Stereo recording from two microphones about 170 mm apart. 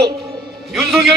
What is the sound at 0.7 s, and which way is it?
Speech, centre (ahead or behind).